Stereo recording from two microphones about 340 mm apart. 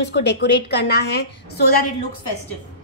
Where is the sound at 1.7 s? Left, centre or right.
Left.